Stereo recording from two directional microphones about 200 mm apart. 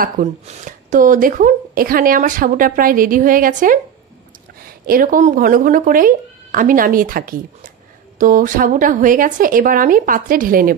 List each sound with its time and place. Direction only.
0.0 s speech: 40° right (ahead or behind)